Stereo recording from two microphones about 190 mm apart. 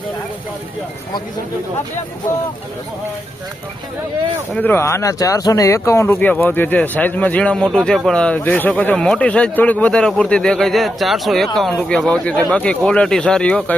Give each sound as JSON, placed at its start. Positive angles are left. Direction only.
{"t": 4.5, "sound": "speech", "side_deg": 10}